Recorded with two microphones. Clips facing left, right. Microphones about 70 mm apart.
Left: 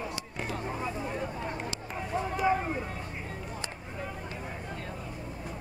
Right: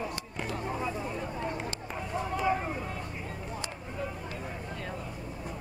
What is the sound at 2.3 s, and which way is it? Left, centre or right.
Vehicle, centre.